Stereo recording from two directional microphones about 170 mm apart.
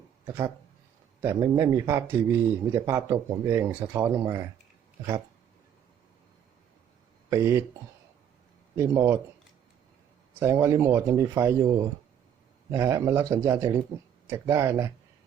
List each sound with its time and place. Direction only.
1.2 s speech: 15° right (ahead or behind)
7.3 s speech: 15° right (ahead or behind)
8.7 s speech: 15° right (ahead or behind)
10.4 s speech: 15° right (ahead or behind)